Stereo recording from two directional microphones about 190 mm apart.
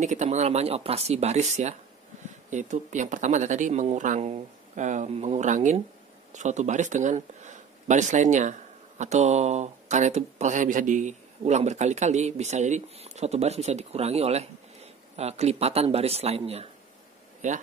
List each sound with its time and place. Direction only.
0.0 s speech: 40° right (ahead or behind)